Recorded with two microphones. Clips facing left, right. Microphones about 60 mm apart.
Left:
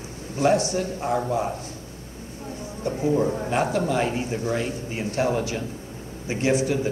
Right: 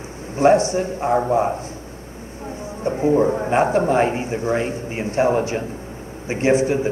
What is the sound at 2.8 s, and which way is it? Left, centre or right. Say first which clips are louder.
A man's voice: right 5 dB; right.